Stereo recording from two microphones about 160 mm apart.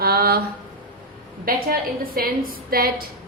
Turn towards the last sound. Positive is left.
turn(degrees=-70)  # may be behind; listen again after turning